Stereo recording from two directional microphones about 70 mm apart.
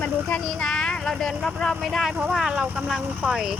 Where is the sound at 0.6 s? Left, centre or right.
Centre.